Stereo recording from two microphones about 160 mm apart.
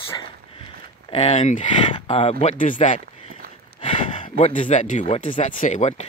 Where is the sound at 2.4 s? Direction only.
50° left (ahead or behind).